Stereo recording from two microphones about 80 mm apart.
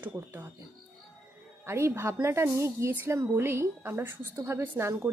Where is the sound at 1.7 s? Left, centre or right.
Right.